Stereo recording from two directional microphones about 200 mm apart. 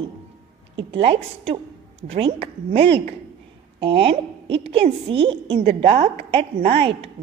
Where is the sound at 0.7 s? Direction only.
30° right (ahead or behind).